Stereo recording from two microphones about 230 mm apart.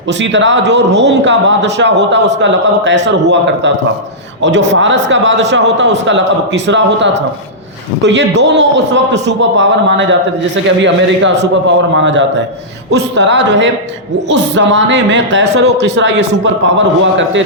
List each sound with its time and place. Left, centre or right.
0.2 s a man's voice: right